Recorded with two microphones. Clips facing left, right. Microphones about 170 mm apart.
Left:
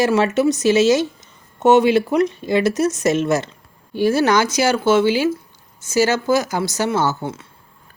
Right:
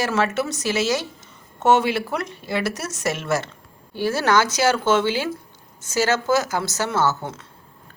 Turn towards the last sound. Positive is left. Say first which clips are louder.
# left 2 dB
turn(degrees=10)  # may be behind; listen again after turning